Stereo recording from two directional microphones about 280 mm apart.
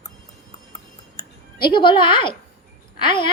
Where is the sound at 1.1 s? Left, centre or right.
Centre.